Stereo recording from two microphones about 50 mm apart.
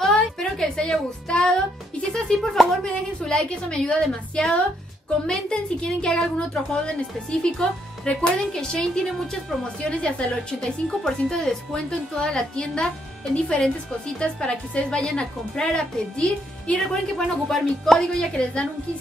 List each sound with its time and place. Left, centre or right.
0.0 s music: centre
2.4 s a woman's voice: centre
3.3 s a woman's voice: centre
9.0 s a woman's voice: centre
9.6 s a woman's voice: left
10.9 s a woman's voice: centre
17.5 s a woman's voice: centre
18.3 s a woman's voice: centre